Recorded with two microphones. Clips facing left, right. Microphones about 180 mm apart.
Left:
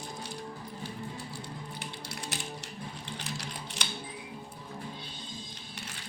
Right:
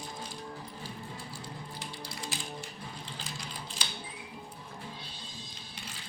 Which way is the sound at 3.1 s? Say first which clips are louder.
Left 3 dB; 70° left (ahead or behind).